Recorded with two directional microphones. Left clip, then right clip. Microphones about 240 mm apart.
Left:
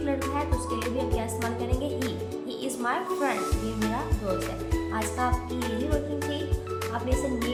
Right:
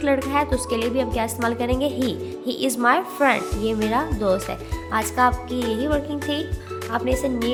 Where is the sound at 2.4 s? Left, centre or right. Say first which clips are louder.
Right 11 dB; right.